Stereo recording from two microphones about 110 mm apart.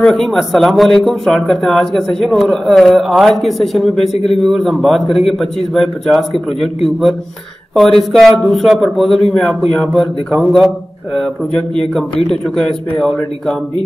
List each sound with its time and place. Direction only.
0.0 s speech: 5° left (ahead or behind)
7.7 s speech: centre (ahead or behind)
12.3 s speech: 5° left (ahead or behind)